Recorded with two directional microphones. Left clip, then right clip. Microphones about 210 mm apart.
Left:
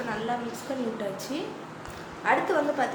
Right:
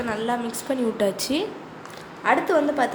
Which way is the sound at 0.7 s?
50° right (ahead or behind).